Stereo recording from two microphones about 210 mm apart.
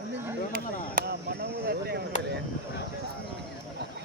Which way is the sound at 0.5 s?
45° right (ahead or behind).